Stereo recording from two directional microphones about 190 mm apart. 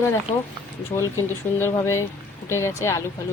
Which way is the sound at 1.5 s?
15° left (ahead or behind).